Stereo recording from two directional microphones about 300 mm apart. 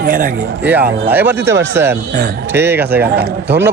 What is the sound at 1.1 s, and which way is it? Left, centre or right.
A man's voice, centre.